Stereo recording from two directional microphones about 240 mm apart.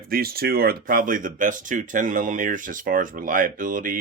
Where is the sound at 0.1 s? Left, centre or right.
Right.